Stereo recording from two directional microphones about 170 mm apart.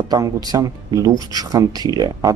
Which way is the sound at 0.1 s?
20° right (ahead or behind).